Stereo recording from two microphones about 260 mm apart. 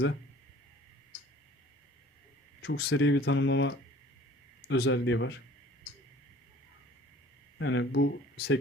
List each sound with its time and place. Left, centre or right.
2.6 s speech: left
7.6 s speech: left